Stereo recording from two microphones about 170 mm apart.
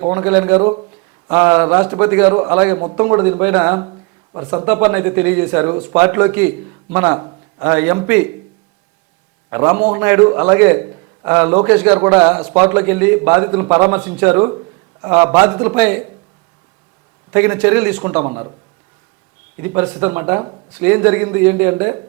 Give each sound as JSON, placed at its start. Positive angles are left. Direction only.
{"t": 0.0, "sound": "speech", "side_deg": -10}
{"t": 9.5, "sound": "a man's voice", "side_deg": -15}
{"t": 17.3, "sound": "speech", "side_deg": -10}
{"t": 18.3, "sound": "speech", "side_deg": -20}
{"t": 19.5, "sound": "speech", "side_deg": -10}